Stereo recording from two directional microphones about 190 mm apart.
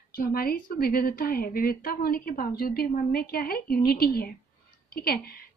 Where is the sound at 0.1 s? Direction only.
50° left (ahead or behind).